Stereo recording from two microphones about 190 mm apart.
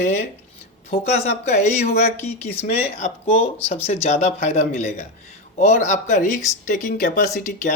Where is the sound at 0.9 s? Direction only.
35° left (ahead or behind).